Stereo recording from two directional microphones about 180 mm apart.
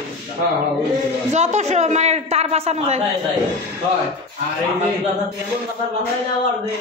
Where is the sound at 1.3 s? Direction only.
40° right (ahead or behind).